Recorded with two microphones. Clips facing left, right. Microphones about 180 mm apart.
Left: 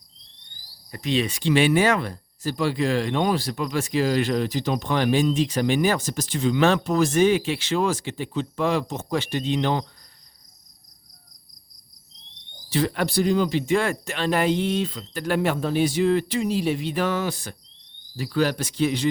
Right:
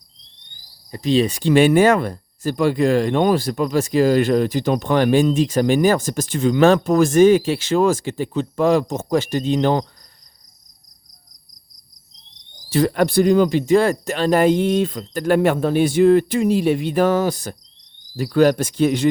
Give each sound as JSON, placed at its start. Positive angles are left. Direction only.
{"t": 0.9, "sound": "speech", "side_deg": -30}
{"t": 12.7, "sound": "speech", "side_deg": -45}